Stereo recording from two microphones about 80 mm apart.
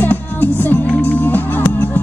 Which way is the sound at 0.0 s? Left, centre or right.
Left.